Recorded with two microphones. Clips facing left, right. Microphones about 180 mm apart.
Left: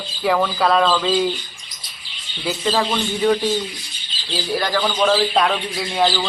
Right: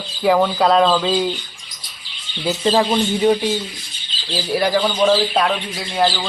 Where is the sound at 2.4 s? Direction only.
25° right (ahead or behind).